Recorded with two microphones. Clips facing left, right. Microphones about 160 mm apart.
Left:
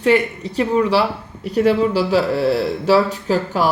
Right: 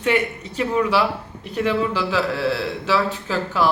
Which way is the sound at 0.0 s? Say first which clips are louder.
Left 5 dB; 35° left (ahead or behind).